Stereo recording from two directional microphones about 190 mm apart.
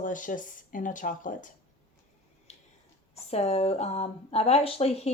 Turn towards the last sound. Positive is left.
turn(degrees=30)  # may be behind; listen again after turning